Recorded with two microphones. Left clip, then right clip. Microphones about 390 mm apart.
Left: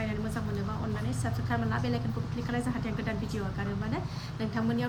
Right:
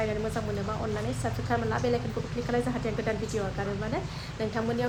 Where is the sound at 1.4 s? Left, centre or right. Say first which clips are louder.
Right 5 dB; centre.